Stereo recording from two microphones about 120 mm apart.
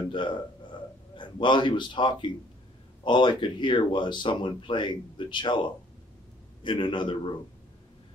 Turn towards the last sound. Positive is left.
turn(degrees=45)  # may be behind; listen again after turning